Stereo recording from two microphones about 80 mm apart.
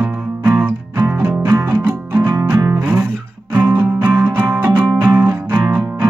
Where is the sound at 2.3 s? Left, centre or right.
Right.